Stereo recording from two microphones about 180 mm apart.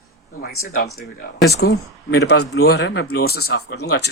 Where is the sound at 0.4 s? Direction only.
55° left (ahead or behind).